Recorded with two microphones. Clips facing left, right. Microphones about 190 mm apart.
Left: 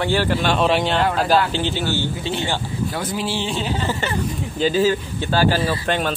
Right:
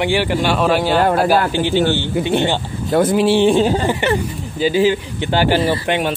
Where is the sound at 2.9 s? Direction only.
50° right (ahead or behind).